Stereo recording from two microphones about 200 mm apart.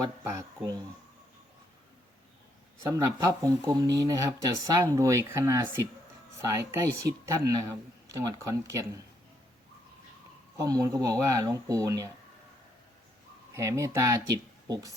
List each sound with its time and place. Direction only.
0.0 s speech: 15° right (ahead or behind)
2.9 s speech: 15° right (ahead or behind)
10.6 s speech: 15° right (ahead or behind)
13.5 s speech: 15° right (ahead or behind)